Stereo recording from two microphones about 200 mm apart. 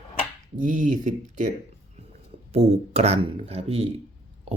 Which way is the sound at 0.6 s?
40° right (ahead or behind).